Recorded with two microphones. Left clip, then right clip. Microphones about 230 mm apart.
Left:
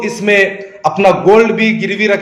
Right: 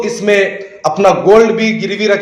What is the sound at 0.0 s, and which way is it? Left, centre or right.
A man's voice, left.